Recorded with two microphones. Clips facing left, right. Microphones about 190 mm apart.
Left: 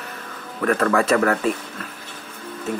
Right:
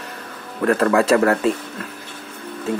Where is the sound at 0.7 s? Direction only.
30° right (ahead or behind).